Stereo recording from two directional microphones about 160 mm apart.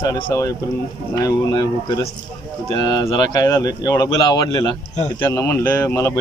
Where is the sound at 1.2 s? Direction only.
25° left (ahead or behind).